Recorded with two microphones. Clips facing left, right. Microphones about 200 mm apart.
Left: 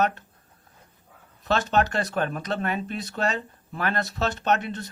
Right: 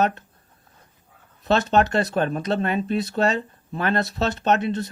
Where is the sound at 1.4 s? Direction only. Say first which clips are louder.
Right 4 dB; 25° right (ahead or behind).